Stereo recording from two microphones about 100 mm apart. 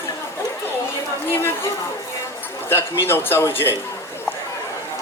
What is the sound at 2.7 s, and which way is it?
Speech, 25° left (ahead or behind).